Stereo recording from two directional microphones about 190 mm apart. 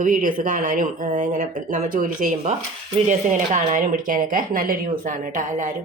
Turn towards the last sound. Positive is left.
turn(degrees=-40)  # may be behind; listen again after turning